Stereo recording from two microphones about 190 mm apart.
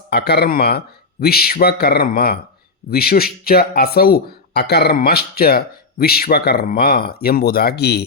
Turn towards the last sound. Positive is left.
turn(degrees=60)  # may be behind; listen again after turning